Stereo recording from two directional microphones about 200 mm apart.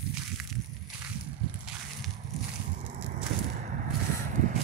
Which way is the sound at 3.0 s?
40° right (ahead or behind).